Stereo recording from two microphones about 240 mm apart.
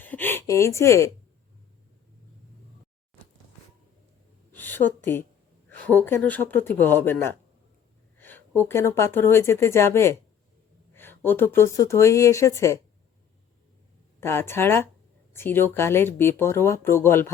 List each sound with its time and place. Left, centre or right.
0.0 s speech: centre
4.5 s a woman's voice: centre
14.2 s speech: centre